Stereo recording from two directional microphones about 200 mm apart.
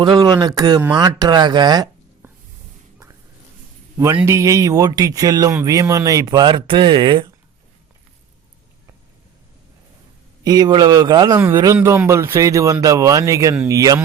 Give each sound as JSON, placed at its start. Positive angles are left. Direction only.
{"t": 0.0, "sound": "speech", "side_deg": -20}
{"t": 3.9, "sound": "speech", "side_deg": -15}
{"t": 10.4, "sound": "speech", "side_deg": -20}